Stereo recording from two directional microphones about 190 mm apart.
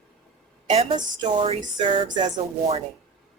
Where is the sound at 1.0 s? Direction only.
25° right (ahead or behind).